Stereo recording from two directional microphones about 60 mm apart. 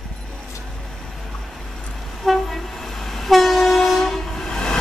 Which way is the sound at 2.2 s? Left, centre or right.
Centre.